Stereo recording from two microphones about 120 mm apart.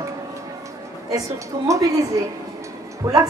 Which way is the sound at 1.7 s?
30° right (ahead or behind).